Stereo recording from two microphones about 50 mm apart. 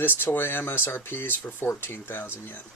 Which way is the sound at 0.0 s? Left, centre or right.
Left.